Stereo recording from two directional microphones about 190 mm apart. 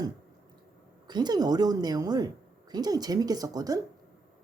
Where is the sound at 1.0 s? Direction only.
20° right (ahead or behind).